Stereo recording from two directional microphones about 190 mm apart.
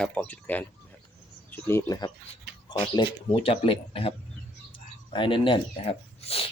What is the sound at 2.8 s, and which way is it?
Speech, 25° left (ahead or behind).